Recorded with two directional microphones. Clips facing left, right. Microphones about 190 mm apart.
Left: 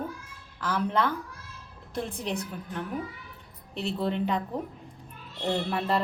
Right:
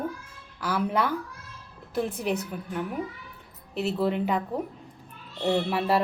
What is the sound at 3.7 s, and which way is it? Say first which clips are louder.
Speech: right 3 dB; 5° right (ahead or behind).